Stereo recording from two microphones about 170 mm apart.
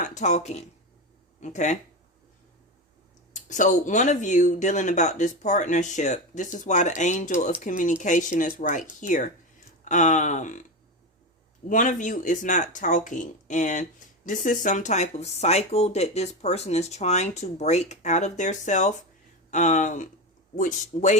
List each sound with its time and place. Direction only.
0.0 s speech: 45° left (ahead or behind)
3.3 s speech: 45° left (ahead or behind)
11.7 s speech: 50° left (ahead or behind)